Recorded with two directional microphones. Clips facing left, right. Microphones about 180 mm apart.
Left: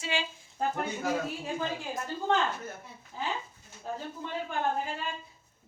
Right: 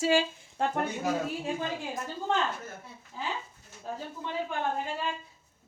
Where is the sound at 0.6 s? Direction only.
90° right.